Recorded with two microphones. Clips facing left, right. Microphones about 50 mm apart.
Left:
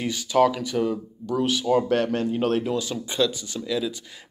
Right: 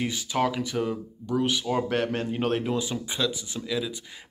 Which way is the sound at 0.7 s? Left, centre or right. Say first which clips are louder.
Left 4 dB; centre.